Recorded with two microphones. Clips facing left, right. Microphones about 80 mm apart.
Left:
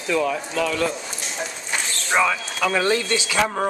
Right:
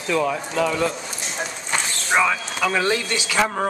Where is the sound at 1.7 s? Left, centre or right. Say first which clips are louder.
Right 2 dB; centre.